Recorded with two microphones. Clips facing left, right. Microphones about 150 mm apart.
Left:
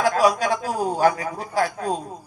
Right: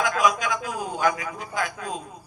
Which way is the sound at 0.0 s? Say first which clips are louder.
Left 4 dB; 35° left (ahead or behind).